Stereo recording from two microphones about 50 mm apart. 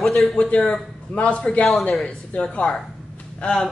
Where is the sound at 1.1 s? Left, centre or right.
Left.